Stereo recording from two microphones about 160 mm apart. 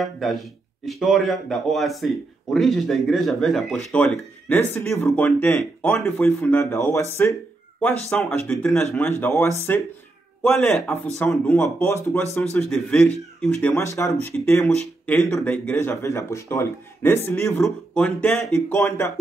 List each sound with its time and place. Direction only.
0.0 s speech: centre (ahead or behind); by 7.3 s 15° left (ahead or behind)
7.8 s speech: 5° left (ahead or behind)
12.5 s speech: centre (ahead or behind)